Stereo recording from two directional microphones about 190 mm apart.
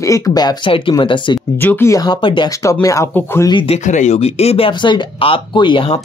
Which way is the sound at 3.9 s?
40° left (ahead or behind).